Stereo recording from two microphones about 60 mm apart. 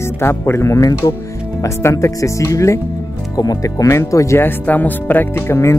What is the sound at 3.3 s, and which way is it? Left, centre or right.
Speech, left.